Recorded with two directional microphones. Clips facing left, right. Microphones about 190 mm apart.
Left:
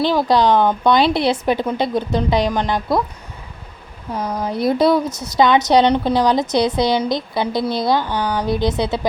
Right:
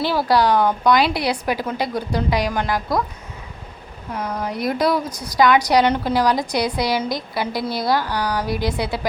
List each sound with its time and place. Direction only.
0.0 s a woman's voice: 20° left (ahead or behind)
4.1 s a woman's voice: 30° left (ahead or behind)